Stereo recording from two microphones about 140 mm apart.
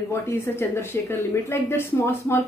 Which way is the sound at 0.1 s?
15° left (ahead or behind).